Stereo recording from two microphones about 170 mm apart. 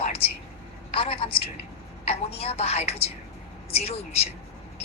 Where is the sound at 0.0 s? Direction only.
35° left (ahead or behind).